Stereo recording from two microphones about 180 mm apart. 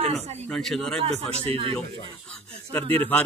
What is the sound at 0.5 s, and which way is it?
Speech, centre (ahead or behind).